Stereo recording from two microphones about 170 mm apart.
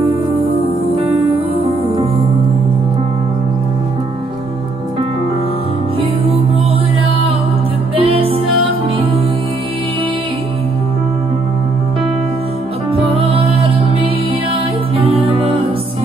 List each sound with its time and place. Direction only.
0.0 s music: 30° right (ahead or behind)
5.9 s music: 35° right (ahead or behind)
7.9 s music: 35° right (ahead or behind)
12.9 s music: 30° right (ahead or behind)
14.5 s music: 35° right (ahead or behind)